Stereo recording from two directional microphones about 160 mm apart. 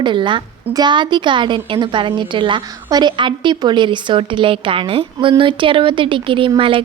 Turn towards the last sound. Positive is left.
turn(degrees=-35)  # may be behind; listen again after turning